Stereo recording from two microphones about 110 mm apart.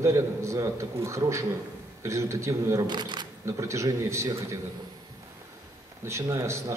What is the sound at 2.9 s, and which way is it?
Speech, 40° right (ahead or behind).